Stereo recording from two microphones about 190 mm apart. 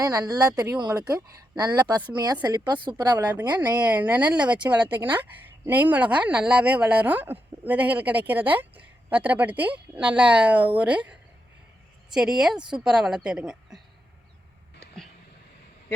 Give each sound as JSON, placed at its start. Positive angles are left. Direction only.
{"t": 0.0, "sound": "a woman's voice", "side_deg": -15}
{"t": 3.3, "sound": "a woman's voice", "side_deg": -10}